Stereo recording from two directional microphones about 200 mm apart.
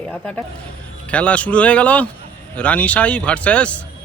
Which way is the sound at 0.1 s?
5° left (ahead or behind).